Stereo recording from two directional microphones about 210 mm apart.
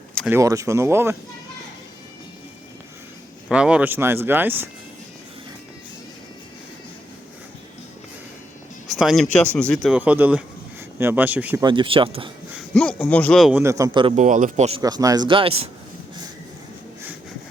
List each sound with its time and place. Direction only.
0.3 s speech: 15° right (ahead or behind)
3.5 s speech: 5° right (ahead or behind)
9.0 s a man's voice: centre (ahead or behind)
11.6 s speech: 25° right (ahead or behind)
12.5 s a man's voice: 5° left (ahead or behind); by 14.1 s 20° right (ahead or behind)
14.2 s speech: 35° right (ahead or behind)
14.8 s speech: 15° right (ahead or behind)